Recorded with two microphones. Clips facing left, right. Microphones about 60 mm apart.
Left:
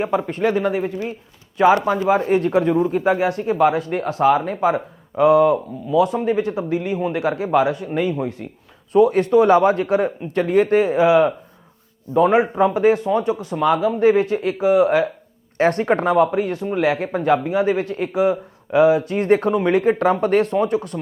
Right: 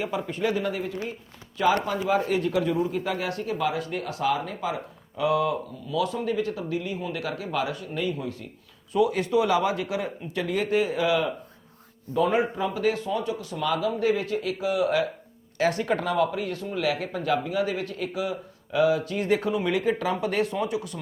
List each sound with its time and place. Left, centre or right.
0.0 s speech: left
2.4 s speech: left
3.1 s speech: left
3.8 s speech: left
12.7 s speech: left